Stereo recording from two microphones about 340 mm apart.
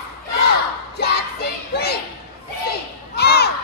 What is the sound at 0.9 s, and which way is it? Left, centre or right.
Child singing, left.